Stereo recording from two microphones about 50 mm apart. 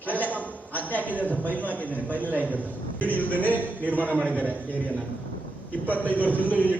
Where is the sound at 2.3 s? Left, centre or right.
Right.